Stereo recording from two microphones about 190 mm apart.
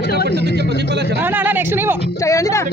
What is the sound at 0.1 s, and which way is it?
Speech, 55° left (ahead or behind).